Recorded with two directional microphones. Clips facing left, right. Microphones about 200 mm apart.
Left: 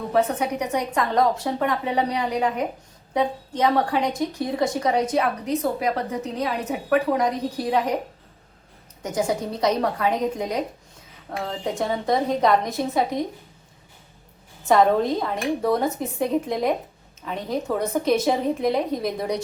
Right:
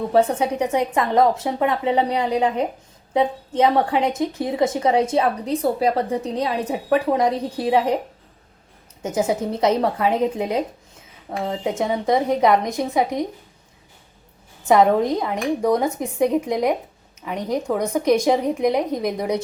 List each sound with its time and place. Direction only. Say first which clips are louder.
0.1 s a woman's voice: right 3 dB; 30° right (ahead or behind)
9.0 s a woman's voice: right 3 dB; 25° right (ahead or behind)
14.7 s speech: right 2 dB; 15° right (ahead or behind)